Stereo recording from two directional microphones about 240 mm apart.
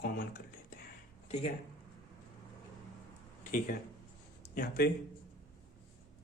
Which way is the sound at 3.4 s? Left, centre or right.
Left.